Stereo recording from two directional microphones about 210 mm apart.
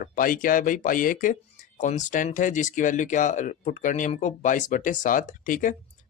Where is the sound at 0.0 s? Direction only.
40° left (ahead or behind).